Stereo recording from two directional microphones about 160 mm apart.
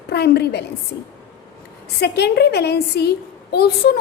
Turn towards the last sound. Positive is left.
turn(degrees=75)  # may be behind; listen again after turning